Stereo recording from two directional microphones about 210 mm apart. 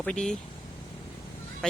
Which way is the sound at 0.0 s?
5° left (ahead or behind).